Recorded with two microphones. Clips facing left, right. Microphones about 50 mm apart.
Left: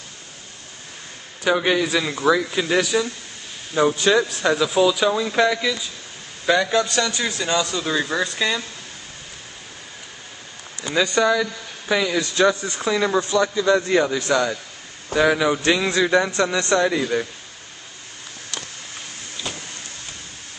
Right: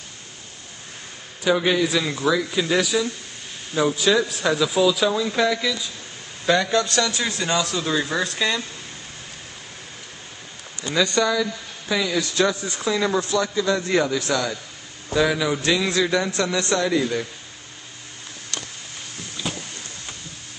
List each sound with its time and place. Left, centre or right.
1.4 s a man's voice: centre
3.8 s speech: left
4.1 s a man's voice: centre
10.9 s a man's voice: centre
19.4 s a sound: centre